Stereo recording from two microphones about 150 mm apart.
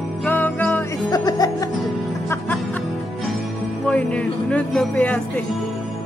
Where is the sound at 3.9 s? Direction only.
10° left (ahead or behind).